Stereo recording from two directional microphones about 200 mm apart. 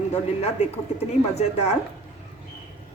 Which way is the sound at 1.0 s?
35° left (ahead or behind).